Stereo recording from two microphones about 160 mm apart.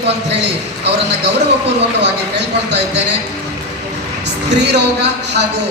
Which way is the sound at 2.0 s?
90° right.